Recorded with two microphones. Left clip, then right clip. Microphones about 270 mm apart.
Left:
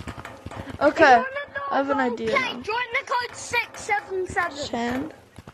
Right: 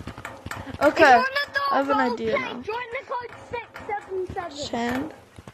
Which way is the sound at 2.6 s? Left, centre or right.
Left.